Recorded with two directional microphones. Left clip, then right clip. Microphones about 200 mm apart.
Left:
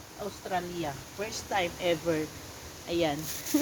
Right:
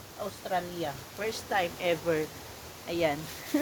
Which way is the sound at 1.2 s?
15° right (ahead or behind).